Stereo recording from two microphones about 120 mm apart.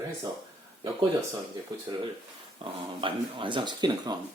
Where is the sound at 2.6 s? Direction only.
45° right (ahead or behind).